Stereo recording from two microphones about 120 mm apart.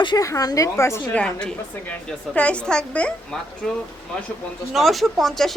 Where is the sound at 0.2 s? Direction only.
30° left (ahead or behind).